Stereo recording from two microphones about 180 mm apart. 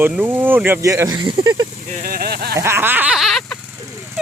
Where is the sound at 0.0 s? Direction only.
10° right (ahead or behind).